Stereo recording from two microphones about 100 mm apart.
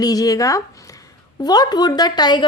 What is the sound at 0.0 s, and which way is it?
Speech, 40° left (ahead or behind).